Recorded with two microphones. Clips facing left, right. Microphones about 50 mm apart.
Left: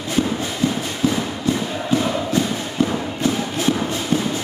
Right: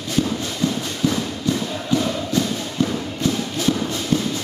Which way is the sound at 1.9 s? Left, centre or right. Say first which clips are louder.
Left 1 dB; left.